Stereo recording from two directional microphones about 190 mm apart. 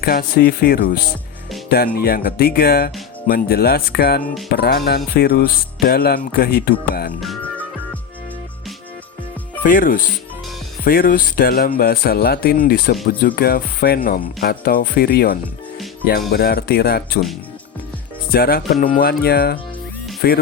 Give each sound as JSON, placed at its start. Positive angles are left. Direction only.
{"t": 0.0, "sound": "speech", "side_deg": 55}
{"t": 7.2, "sound": "music", "side_deg": 5}
{"t": 9.6, "sound": "speech", "side_deg": 45}
{"t": 18.3, "sound": "speech", "side_deg": 50}